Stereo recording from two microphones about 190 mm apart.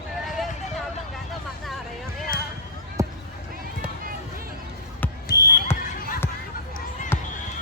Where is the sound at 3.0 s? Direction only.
15° right (ahead or behind).